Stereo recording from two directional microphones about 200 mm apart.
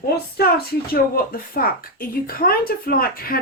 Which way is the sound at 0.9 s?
45° left (ahead or behind).